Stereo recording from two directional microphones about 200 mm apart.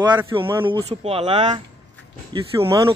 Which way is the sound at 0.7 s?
30° right (ahead or behind).